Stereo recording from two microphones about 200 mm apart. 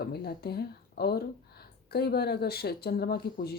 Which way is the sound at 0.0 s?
50° left (ahead or behind).